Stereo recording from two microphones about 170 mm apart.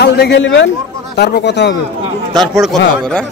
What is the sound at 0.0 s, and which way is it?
A man's voice, 85° left.